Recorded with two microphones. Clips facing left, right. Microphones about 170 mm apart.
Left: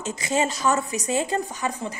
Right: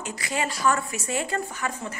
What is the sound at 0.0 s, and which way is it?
A woman's voice, 20° left (ahead or behind).